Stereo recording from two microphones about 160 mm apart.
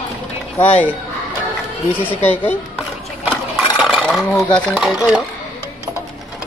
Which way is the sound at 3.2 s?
10° right (ahead or behind).